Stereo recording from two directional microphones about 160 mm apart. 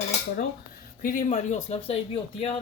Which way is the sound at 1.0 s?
50° left (ahead or behind).